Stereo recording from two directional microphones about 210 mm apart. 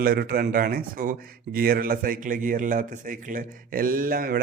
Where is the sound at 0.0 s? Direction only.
45° right (ahead or behind).